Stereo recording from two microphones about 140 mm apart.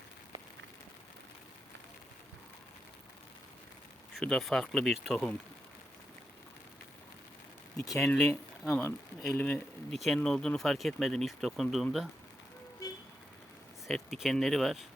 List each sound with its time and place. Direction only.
4.1 s speech: 5° left (ahead or behind)
7.8 s speech: 5° left (ahead or behind)
9.9 s speech: centre (ahead or behind)
12.8 s vehicle: 25° left (ahead or behind)
13.8 s speech: centre (ahead or behind)